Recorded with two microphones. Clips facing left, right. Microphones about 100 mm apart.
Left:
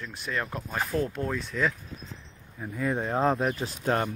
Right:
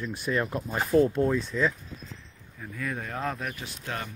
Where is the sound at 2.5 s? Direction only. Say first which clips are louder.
Left 5 dB; 25° left (ahead or behind).